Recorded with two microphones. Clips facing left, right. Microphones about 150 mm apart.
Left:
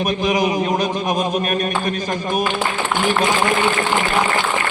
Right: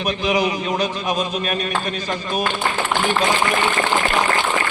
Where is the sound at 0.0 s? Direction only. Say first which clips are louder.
Left 2 dB; 50° left (ahead or behind).